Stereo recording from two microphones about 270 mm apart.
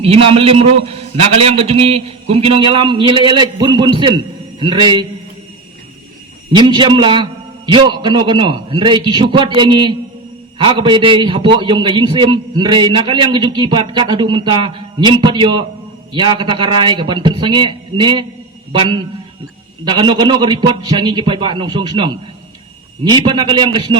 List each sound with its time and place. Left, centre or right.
0.0 s a man's voice: right
6.6 s a man's voice: centre